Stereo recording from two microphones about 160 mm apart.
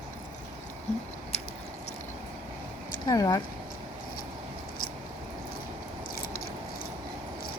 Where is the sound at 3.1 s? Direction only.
25° left (ahead or behind).